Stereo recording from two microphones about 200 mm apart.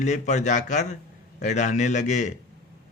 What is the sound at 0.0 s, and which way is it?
A man's voice, 35° left (ahead or behind).